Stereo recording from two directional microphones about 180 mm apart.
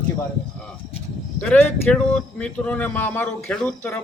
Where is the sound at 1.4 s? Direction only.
10° left (ahead or behind).